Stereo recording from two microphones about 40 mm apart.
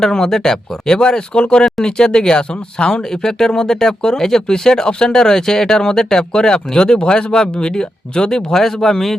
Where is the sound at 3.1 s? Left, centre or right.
Centre.